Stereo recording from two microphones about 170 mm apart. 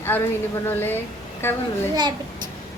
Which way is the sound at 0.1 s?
10° left (ahead or behind).